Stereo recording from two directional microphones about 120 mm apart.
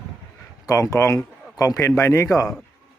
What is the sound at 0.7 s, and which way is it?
A man's voice, 25° left (ahead or behind).